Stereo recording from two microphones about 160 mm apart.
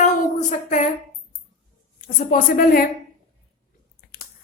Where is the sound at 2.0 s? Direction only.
60° left (ahead or behind).